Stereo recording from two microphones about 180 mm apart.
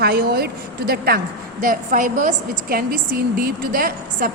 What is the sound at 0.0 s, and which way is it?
A woman's voice, 60° right (ahead or behind).